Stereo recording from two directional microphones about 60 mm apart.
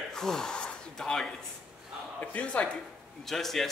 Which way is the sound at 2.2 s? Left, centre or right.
Left.